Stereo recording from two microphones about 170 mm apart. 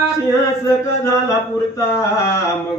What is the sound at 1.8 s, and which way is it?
Speech, 15° left (ahead or behind).